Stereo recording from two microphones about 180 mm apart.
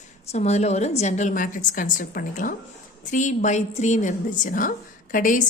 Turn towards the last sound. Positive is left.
turn(degrees=45)  # may be behind; listen again after turning